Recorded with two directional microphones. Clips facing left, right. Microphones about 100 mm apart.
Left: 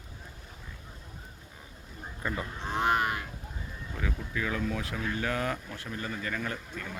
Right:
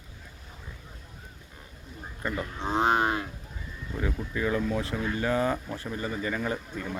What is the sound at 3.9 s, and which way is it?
Speech, 10° right (ahead or behind).